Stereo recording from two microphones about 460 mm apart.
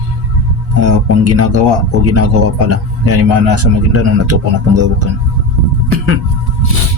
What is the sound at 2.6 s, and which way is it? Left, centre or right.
A man's voice, right.